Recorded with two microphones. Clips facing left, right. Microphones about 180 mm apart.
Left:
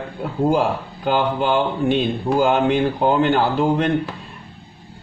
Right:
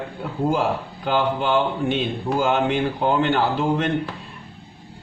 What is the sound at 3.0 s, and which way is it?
Speech, 40° left (ahead or behind).